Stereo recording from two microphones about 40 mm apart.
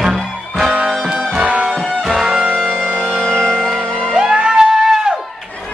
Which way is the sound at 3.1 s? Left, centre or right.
Centre.